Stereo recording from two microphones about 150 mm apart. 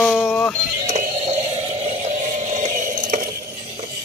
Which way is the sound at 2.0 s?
55° right (ahead or behind).